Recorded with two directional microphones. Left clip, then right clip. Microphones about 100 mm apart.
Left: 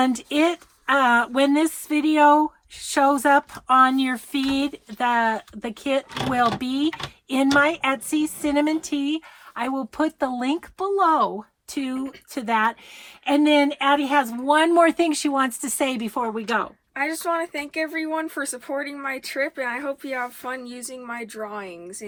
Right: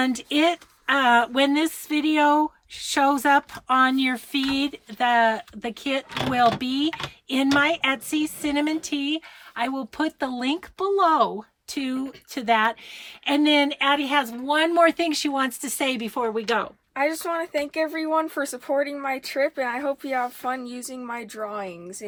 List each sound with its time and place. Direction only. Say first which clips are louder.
0.1 s speech: even; 20° left (ahead or behind)
10.8 s speech: even; 10° left (ahead or behind)
16.9 s speech: even; 50° right (ahead or behind)